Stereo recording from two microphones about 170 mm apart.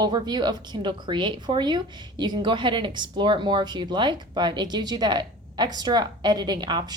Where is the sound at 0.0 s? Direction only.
25° right (ahead or behind).